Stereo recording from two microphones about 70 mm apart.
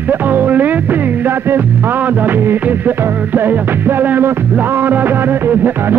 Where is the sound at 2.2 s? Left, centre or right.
Right.